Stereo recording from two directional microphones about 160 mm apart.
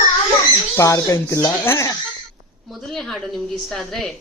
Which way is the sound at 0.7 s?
20° left (ahead or behind).